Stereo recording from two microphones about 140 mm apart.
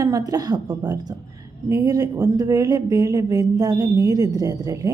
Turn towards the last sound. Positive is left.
turn(degrees=-25)  # may be behind; listen again after turning